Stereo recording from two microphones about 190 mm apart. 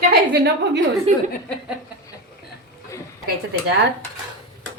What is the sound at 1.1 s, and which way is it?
Speech, 35° right (ahead or behind).